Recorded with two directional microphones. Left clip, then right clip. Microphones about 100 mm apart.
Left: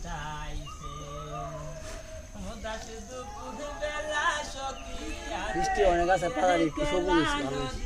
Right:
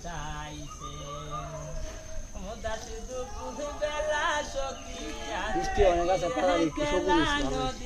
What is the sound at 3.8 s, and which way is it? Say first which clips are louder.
Speech: right 1 dB; 5° left (ahead or behind).